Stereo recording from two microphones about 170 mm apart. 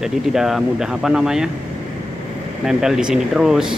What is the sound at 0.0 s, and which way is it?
Speech, 5° right (ahead or behind).